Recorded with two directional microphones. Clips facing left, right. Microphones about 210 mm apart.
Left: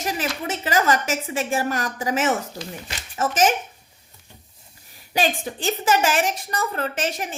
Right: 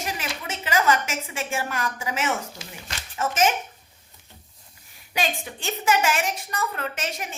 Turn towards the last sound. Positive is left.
turn(degrees=30)  # may be behind; listen again after turning